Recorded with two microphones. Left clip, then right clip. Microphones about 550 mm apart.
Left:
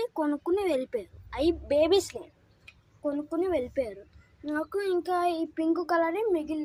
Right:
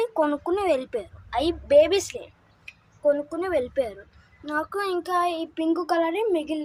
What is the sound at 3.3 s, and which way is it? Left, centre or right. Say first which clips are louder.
A child's voice: right 3 dB; left.